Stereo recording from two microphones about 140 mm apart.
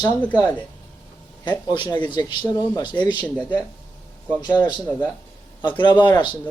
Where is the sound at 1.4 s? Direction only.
35° left (ahead or behind).